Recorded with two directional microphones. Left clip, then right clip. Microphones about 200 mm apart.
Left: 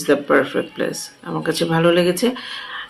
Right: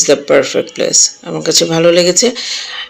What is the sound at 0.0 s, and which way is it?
Speech, 25° right (ahead or behind).